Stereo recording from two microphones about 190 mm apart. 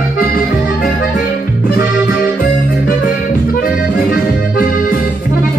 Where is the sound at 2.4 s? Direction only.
50° left (ahead or behind).